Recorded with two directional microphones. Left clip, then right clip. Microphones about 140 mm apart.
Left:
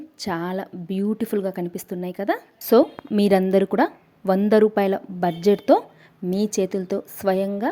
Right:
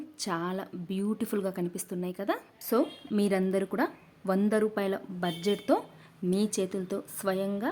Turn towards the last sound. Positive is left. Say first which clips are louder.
# left 9 dB
turn(degrees=30)  # may be behind; listen again after turning